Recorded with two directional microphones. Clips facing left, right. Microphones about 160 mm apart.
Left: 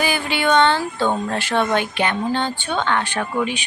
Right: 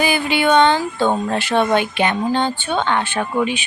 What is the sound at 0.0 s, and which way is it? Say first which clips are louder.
A woman's voice: right 3 dB; 15° right (ahead or behind).